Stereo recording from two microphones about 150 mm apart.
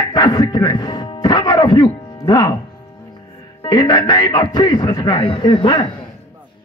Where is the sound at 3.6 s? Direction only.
30° left (ahead or behind).